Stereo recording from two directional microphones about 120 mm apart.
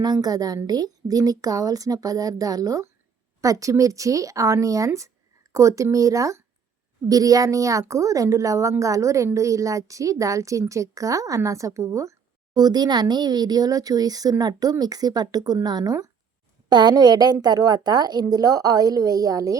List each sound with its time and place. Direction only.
0.0 s a woman's voice: 35° right (ahead or behind)